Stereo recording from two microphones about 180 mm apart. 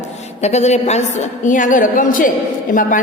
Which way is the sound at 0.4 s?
40° left (ahead or behind).